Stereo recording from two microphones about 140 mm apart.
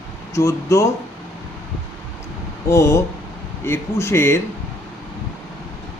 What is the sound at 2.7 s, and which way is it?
Speech, 20° left (ahead or behind).